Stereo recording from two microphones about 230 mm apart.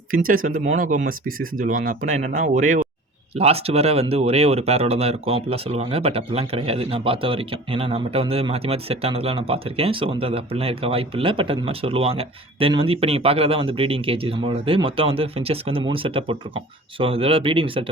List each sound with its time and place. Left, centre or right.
0.3 s speech: right